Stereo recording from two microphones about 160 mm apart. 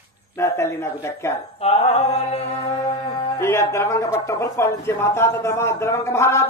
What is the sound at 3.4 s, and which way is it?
Speech, 15° left (ahead or behind).